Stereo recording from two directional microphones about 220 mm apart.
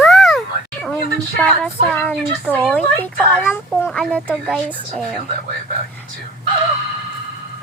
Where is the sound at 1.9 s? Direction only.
5° left (ahead or behind).